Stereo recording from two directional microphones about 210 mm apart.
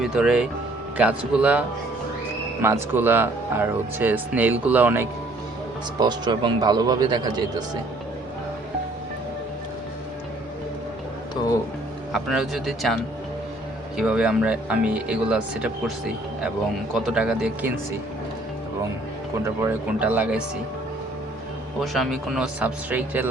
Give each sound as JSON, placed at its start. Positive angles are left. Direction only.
{"t": 0.0, "sound": "speech", "side_deg": -5}
{"t": 6.0, "sound": "speech", "side_deg": -20}
{"t": 12.1, "sound": "speech", "side_deg": 0}
{"t": 16.9, "sound": "speech", "side_deg": 0}
{"t": 19.5, "sound": "speech", "side_deg": -10}
{"t": 21.9, "sound": "speech", "side_deg": 0}